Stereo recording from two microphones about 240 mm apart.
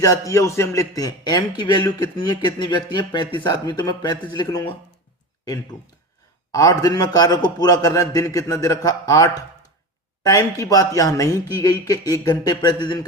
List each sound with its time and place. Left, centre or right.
0.0 s a man's voice: centre
6.5 s a man's voice: centre